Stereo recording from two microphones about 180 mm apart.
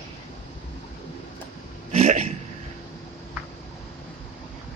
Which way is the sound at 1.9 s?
40° right (ahead or behind).